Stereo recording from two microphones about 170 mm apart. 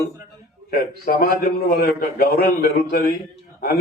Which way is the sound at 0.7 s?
60° left (ahead or behind).